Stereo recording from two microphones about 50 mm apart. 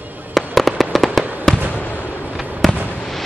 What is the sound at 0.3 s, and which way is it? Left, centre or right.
Fireworks, centre.